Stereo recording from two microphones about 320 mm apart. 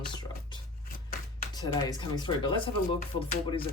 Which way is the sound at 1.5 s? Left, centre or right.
Centre.